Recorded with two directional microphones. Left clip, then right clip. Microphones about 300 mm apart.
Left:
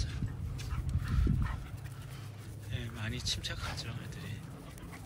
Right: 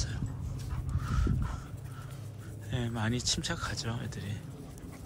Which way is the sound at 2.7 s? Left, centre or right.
Centre.